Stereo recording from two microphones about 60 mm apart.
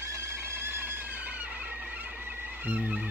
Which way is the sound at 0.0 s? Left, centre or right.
Right.